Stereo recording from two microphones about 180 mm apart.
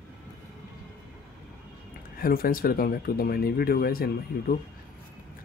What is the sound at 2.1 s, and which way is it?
Speech, 55° left (ahead or behind).